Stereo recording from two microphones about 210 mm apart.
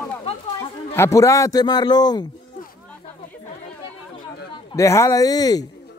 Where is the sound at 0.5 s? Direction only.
15° left (ahead or behind).